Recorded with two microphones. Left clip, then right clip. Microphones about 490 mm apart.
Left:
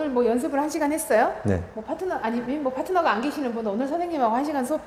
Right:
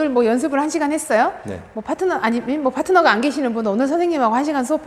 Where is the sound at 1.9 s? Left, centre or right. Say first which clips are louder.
Right 8 dB; right.